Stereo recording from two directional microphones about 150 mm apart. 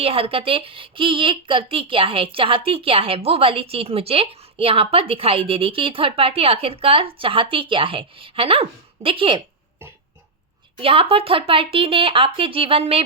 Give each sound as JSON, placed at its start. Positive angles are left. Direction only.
{"t": 0.0, "sound": "a woman's voice", "side_deg": -40}
{"t": 10.8, "sound": "a woman's voice", "side_deg": -35}